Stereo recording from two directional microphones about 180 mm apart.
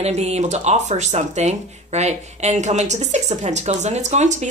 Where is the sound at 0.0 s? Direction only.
35° right (ahead or behind).